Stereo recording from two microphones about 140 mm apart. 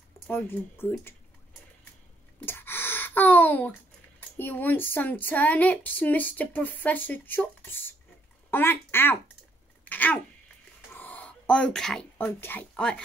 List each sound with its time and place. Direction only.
0.3 s speech: 15° left (ahead or behind)
2.4 s gasp: 15° left (ahead or behind)
4.4 s speech: 15° left (ahead or behind)
9.8 s sneeze: 10° left (ahead or behind)
11.0 s a sound: 10° left (ahead or behind)
12.2 s speech: 15° left (ahead or behind)